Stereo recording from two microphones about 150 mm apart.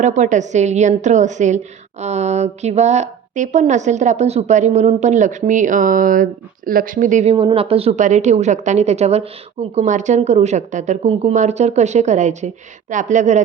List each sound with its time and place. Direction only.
0.0 s a woman's voice: 55° right (ahead or behind)
7.3 s a woman's voice: 35° right (ahead or behind); by 13.4 s 50° right (ahead or behind)